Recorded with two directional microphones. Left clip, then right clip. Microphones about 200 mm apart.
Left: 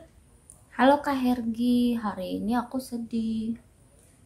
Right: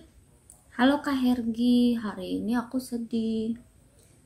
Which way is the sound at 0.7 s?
15° left (ahead or behind).